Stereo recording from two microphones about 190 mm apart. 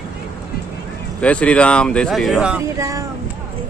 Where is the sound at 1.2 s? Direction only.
5° left (ahead or behind).